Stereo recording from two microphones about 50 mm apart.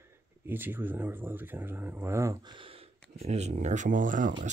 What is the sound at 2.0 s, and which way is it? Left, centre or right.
Speech, right.